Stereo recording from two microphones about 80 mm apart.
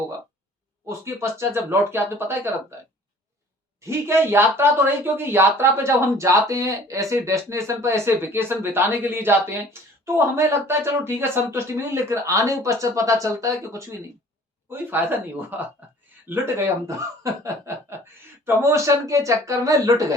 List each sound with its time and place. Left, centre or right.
0.9 s speech: right
3.8 s speech: right
14.7 s speech: right
16.3 s speech: right